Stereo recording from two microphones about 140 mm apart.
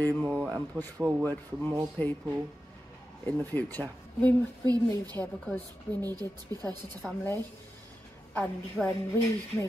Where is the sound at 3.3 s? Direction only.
15° left (ahead or behind).